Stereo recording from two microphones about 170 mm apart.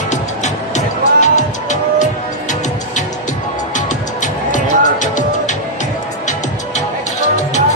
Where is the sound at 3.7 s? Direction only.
45° left (ahead or behind).